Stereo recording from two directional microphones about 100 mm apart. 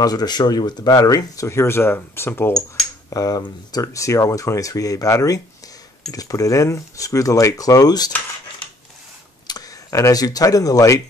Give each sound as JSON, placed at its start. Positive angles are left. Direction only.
{"t": 0.0, "sound": "speech", "side_deg": 40}
{"t": 3.1, "sound": "speech", "side_deg": 40}
{"t": 9.5, "sound": "speech", "side_deg": 35}